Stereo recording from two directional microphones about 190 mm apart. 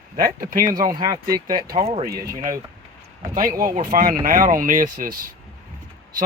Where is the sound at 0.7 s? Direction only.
20° right (ahead or behind).